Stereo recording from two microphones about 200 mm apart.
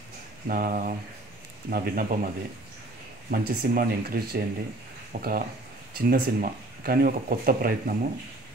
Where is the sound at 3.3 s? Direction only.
50° right (ahead or behind).